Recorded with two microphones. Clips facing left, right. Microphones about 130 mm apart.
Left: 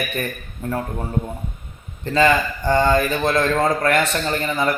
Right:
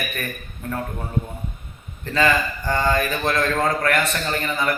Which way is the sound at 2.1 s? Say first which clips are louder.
Left 3 dB; 30° left (ahead or behind).